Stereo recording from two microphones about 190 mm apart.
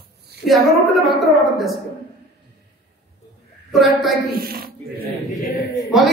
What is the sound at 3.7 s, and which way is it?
Speech, centre (ahead or behind).